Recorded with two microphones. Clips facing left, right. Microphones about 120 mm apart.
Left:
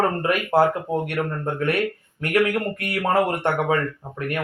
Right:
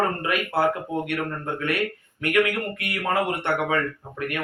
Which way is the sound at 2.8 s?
35° left (ahead or behind).